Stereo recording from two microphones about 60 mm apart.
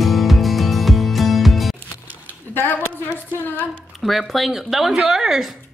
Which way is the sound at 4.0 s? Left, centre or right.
Centre.